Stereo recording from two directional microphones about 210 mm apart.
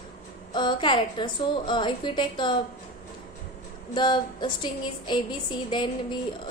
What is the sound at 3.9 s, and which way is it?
Speech, 20° left (ahead or behind).